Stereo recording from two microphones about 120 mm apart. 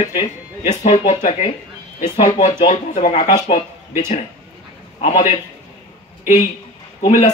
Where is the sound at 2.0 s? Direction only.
40° left (ahead or behind).